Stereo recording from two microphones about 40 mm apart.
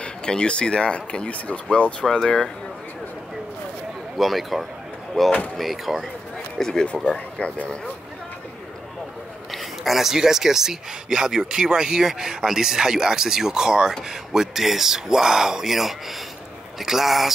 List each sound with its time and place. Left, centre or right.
0.0 s speech: left
4.2 s speech: centre
6.6 s speech: centre
7.1 s speech: left
9.5 s a sound: centre
10.1 s speech: centre